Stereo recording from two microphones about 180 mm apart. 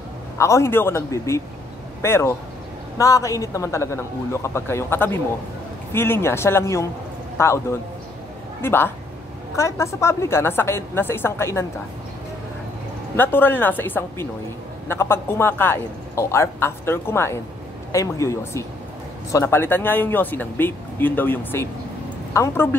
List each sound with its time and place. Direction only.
0.4 s a man's voice: 15° left (ahead or behind)
13.1 s a man's voice: 10° left (ahead or behind)